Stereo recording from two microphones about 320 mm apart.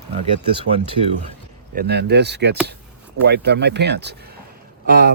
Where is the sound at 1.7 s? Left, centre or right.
Right.